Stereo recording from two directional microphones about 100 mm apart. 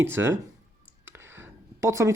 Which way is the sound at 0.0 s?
25° right (ahead or behind).